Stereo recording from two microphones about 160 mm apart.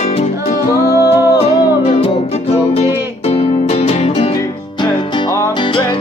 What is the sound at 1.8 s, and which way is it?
Music, 40° left (ahead or behind).